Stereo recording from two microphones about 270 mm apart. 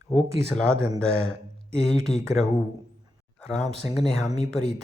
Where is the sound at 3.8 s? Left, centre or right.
Centre.